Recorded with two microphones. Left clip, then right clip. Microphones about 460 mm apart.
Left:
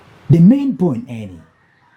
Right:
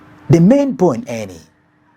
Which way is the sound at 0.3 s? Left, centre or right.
Right.